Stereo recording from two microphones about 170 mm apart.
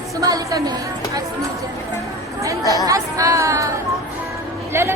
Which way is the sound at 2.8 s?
20° right (ahead or behind).